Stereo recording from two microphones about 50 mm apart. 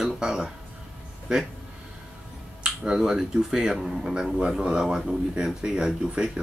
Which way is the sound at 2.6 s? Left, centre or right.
Centre.